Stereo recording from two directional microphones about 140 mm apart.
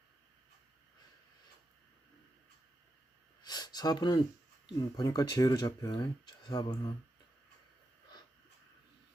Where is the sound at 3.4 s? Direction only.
30° left (ahead or behind).